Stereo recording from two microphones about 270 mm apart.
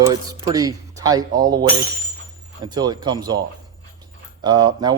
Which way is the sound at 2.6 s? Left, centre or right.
Centre.